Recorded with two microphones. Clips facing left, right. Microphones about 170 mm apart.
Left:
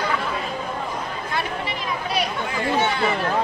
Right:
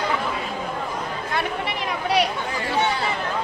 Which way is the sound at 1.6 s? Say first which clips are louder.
Right 2 dB; 70° right (ahead or behind).